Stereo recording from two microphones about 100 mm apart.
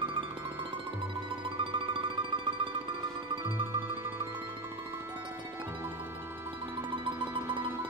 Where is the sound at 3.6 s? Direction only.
20° right (ahead or behind).